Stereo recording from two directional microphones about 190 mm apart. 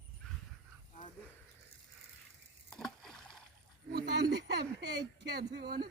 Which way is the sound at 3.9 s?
60° right (ahead or behind).